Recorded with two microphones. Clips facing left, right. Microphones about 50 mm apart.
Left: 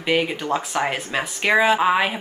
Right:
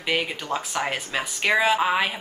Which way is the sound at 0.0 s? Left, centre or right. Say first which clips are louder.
Left 5 dB; centre.